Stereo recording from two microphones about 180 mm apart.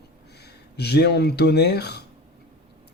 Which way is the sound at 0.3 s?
65° left (ahead or behind).